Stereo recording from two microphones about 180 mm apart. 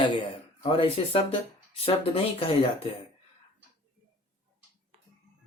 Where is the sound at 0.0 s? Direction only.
25° left (ahead or behind).